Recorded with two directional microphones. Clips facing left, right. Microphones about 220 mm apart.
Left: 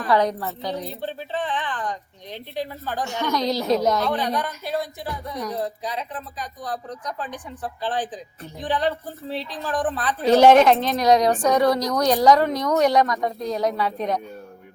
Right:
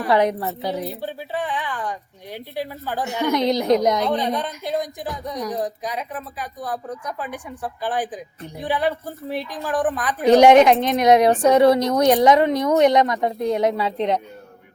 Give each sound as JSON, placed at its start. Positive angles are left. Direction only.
{"t": 0.1, "sound": "a woman's voice", "side_deg": -25}
{"t": 0.6, "sound": "a woman's voice", "side_deg": -5}